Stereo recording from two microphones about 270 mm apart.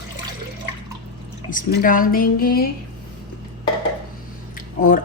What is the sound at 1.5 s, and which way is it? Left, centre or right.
Speech, left.